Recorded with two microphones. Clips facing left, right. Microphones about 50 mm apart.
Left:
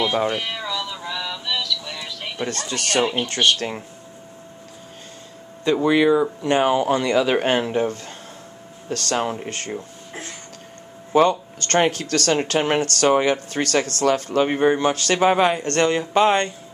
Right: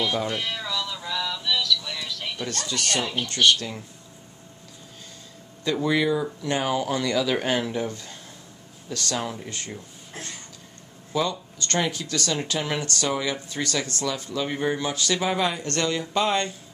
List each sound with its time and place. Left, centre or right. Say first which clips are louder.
0.0 s speech: left 5 dB; left
0.4 s synthetic singing: left 2 dB; centre
2.4 s speech: left 4 dB; left
5.6 s speech: left 6 dB; left
11.1 s speech: left 9 dB; left